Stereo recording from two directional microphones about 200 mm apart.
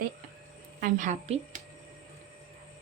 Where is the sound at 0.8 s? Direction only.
40° right (ahead or behind).